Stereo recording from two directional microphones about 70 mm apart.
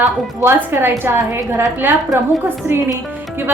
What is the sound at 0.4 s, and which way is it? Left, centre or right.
A woman's voice, right.